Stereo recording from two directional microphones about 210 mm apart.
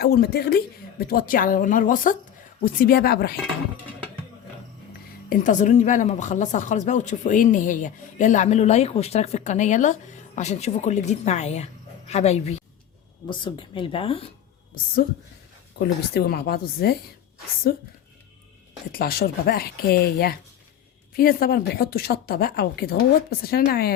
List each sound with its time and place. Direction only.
0.0 s a woman's voice: 50° left (ahead or behind)
5.3 s speech: 35° left (ahead or behind)
15.8 s a woman's voice: 50° left (ahead or behind)
18.9 s a woman's voice: 45° left (ahead or behind)